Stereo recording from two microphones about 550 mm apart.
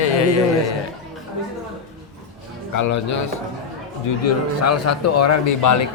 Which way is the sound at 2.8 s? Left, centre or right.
Left.